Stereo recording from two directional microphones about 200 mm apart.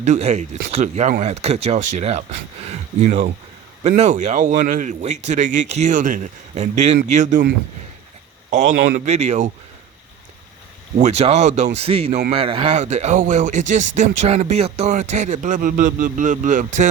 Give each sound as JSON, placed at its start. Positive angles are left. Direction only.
{"t": 0.0, "sound": "a man's voice", "side_deg": -35}
{"t": 10.9, "sound": "a man's voice", "side_deg": -35}